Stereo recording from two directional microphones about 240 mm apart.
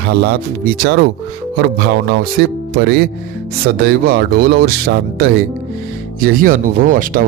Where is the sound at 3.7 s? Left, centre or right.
Right.